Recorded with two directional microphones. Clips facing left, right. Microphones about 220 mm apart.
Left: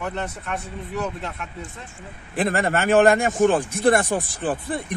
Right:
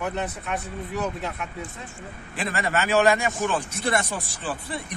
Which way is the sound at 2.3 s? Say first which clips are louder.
Left 5 dB; 50° left (ahead or behind).